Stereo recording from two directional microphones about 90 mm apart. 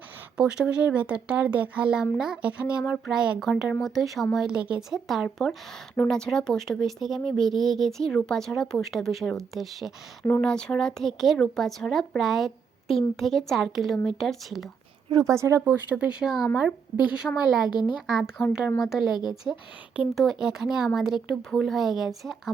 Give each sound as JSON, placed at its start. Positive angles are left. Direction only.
{"t": 0.3, "sound": "speech", "side_deg": -10}
{"t": 15.2, "sound": "speech", "side_deg": -35}
{"t": 15.6, "sound": "speech", "side_deg": -15}
{"t": 16.2, "sound": "speech", "side_deg": -5}